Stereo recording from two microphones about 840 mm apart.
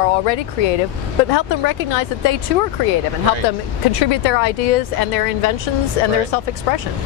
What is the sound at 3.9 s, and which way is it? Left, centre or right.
Speech, left.